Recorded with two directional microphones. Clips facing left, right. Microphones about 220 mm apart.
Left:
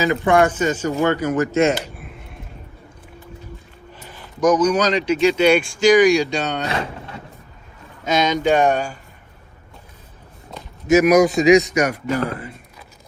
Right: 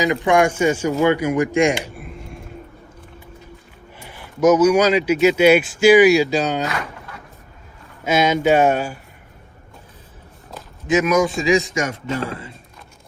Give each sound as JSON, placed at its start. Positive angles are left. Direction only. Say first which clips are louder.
{"t": 0.0, "sound": "speech", "louder": "even", "side_deg": -15}
{"t": 2.0, "sound": "a sound", "louder": "right 4 dB", "side_deg": 0}
{"t": 3.9, "sound": "speech", "louder": "right 3 dB", "side_deg": -10}
{"t": 6.7, "sound": "vehicle", "louder": "left 3 dB", "side_deg": 25}
{"t": 8.0, "sound": "speech", "louder": "right 2 dB", "side_deg": -10}
{"t": 10.6, "sound": "a sound", "louder": "left 1 dB", "side_deg": -5}
{"t": 11.3, "sound": "speech", "louder": "left 5 dB", "side_deg": -25}